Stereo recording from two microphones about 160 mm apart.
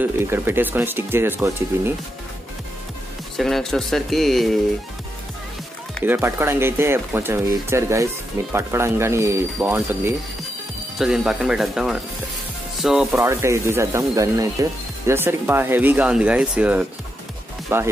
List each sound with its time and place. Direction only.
0.0 s speech: 15° right (ahead or behind)
3.3 s speech: centre (ahead or behind)
6.0 s speech: 15° right (ahead or behind)
13.1 s speech: 15° right (ahead or behind)